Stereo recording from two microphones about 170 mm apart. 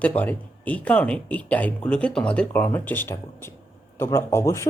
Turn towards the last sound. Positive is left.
turn(degrees=15)  # may be behind; listen again after turning